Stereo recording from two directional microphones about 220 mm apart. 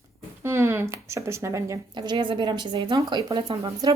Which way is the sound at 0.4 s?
10° right (ahead or behind).